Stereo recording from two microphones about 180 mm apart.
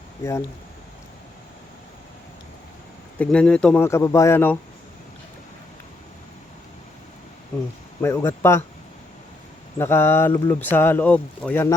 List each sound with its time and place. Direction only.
0.2 s speech: 15° left (ahead or behind)
3.2 s speech: 5° left (ahead or behind)
3.8 s speech: 15° left (ahead or behind)
8.0 s speech: 15° left (ahead or behind)
9.7 s speech: 15° left (ahead or behind)